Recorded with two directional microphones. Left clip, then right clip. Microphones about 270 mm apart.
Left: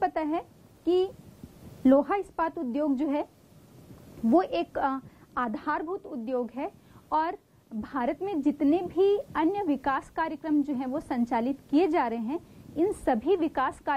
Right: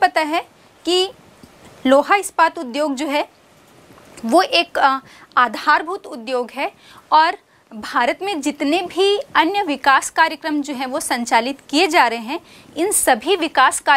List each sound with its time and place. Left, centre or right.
0.0 s a sound: centre
2.0 s a woman's voice: centre
4.4 s a woman's voice: centre
5.9 s a woman's voice: right
6.2 s a woman's voice: centre